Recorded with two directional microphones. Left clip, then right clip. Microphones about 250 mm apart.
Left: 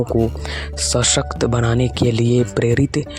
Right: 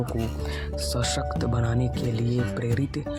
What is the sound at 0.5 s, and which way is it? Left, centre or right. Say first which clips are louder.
Speech: left 9 dB; left.